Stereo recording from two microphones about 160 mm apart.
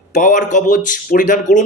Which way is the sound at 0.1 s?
55° left (ahead or behind).